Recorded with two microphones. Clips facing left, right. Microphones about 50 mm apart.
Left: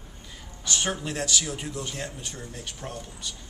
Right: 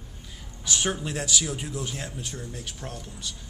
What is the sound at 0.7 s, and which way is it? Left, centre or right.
A man's voice, centre.